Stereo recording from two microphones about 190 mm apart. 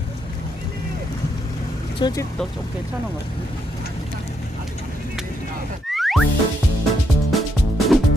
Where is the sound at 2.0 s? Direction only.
25° left (ahead or behind).